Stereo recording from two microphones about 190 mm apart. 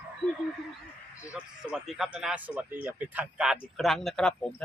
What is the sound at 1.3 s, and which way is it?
Speech, 5° right (ahead or behind).